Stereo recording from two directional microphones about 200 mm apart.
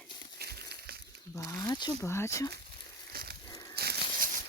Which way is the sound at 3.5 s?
15° left (ahead or behind).